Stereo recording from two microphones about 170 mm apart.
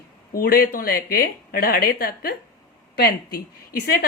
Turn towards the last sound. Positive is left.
turn(degrees=60)  # may be behind; listen again after turning